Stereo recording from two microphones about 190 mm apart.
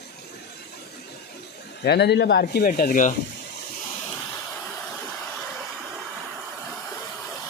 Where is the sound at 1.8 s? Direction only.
60° left (ahead or behind).